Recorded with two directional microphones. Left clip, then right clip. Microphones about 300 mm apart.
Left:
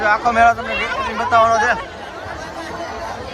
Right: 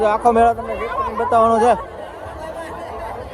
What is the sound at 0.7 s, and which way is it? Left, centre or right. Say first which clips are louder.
Speech: left 2 dB; left.